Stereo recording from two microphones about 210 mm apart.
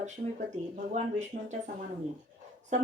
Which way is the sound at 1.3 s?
40° right (ahead or behind).